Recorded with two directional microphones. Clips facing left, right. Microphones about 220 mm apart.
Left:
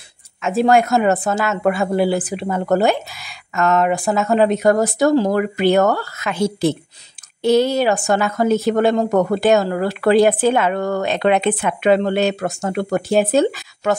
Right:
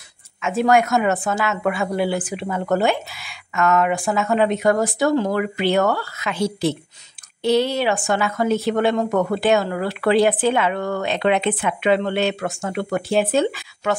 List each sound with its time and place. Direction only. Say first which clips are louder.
0.4 s a woman's voice: left 2 dB; 35° left (ahead or behind)